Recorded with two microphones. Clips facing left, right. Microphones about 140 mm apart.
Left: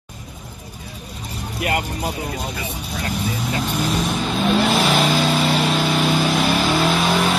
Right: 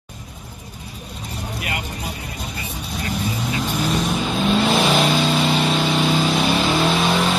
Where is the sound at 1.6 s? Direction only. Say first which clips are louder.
Left 9 dB; 50° left (ahead or behind).